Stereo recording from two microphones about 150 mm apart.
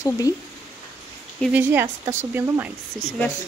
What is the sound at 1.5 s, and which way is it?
Speech, 15° right (ahead or behind).